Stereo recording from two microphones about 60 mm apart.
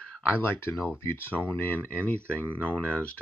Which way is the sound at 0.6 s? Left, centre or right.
Left.